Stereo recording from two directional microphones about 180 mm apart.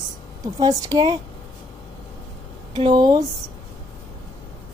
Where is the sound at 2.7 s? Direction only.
25° right (ahead or behind).